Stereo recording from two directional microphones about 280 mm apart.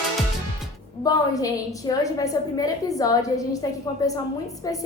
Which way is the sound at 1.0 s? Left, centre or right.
Centre.